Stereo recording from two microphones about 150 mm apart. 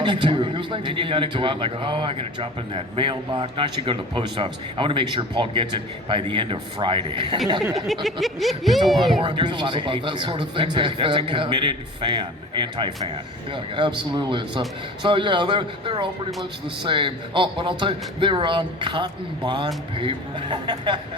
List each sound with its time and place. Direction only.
0.0 s a man's voice: 30° right (ahead or behind)
8.0 s speech: centre (ahead or behind)
9.2 s a man's voice: 30° right (ahead or behind)